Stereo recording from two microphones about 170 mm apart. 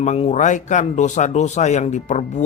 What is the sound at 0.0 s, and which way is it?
A man's voice, 40° left (ahead or behind).